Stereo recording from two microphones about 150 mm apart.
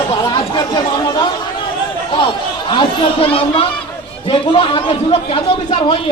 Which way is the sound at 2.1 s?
35° left (ahead or behind).